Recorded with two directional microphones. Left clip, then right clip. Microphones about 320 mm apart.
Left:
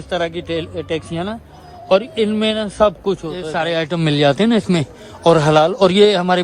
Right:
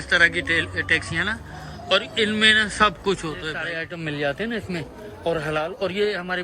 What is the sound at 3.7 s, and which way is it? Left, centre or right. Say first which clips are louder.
A man's voice: left 11 dB; left.